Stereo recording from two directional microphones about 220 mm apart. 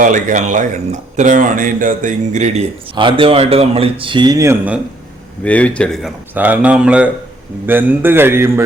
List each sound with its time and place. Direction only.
0.0 s speech: 35° right (ahead or behind); by 4.8 s 10° right (ahead or behind)
5.4 s a man's voice: 5° left (ahead or behind); by 8.6 s 10° right (ahead or behind)